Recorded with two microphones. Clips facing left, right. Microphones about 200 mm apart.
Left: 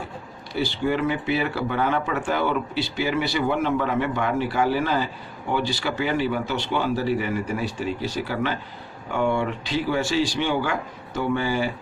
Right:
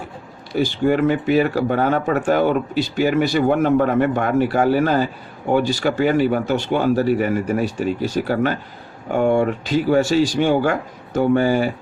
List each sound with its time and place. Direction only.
0.5 s speech: 45° right (ahead or behind)